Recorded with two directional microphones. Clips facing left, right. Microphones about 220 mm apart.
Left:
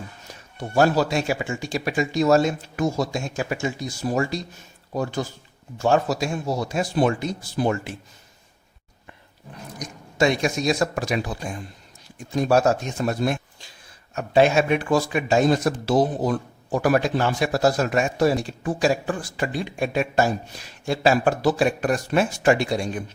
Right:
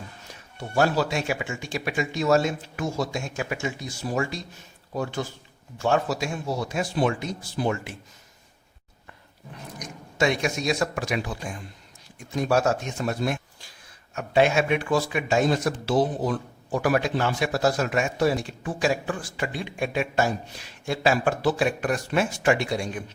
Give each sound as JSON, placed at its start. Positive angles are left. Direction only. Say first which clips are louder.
{"t": 0.8, "sound": "a man's voice", "louder": "left 4 dB", "side_deg": 40}
{"t": 5.8, "sound": "a man's voice", "louder": "left 3 dB", "side_deg": 40}
{"t": 9.7, "sound": "a man's voice", "louder": "left 3 dB", "side_deg": 35}
{"t": 12.4, "sound": "a man's voice", "louder": "left 4 dB", "side_deg": 35}